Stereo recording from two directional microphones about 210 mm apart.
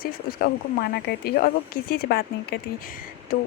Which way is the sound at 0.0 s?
45° left (ahead or behind).